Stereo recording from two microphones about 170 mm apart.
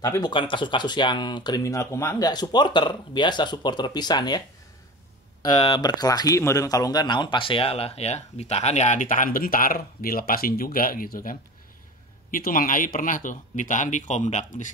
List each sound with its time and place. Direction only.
0.0 s speech: 20° left (ahead or behind)
5.4 s speech: 25° left (ahead or behind); by 14.7 s 45° left (ahead or behind)